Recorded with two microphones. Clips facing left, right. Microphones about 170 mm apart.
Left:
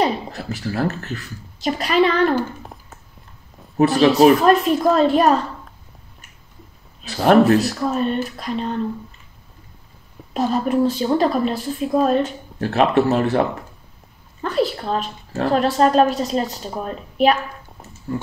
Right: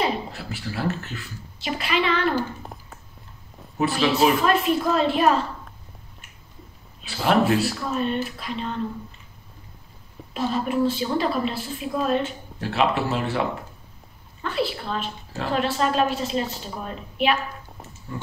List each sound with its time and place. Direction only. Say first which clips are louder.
0.0 s a woman's voice: left 5 dB; 40° left (ahead or behind)
2.6 s a sound: left 1 dB; centre (ahead or behind)
3.7 s a woman's voice: left 8 dB; 40° left (ahead or behind)
7.0 s a woman's voice: left 7 dB; 40° left (ahead or behind)
10.3 s a woman's voice: left 5 dB; 40° left (ahead or behind)